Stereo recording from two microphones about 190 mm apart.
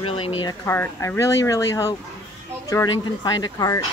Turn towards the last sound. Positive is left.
turn(degrees=20)  # may be behind; listen again after turning